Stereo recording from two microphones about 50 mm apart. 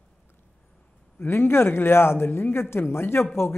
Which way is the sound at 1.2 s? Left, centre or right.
Left.